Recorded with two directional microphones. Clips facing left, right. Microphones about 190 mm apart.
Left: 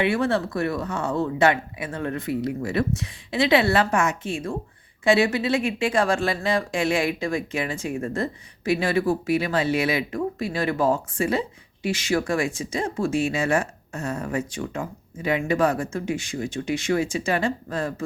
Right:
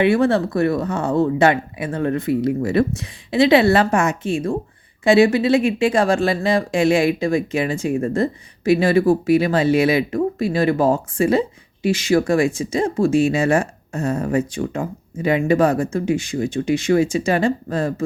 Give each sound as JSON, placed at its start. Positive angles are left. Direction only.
{"t": 0.0, "sound": "speech", "side_deg": -45}